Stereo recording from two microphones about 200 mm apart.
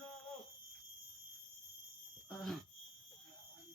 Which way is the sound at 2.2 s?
Centre (ahead or behind).